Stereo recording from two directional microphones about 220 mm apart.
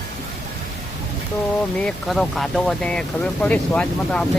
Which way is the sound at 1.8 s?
Centre (ahead or behind).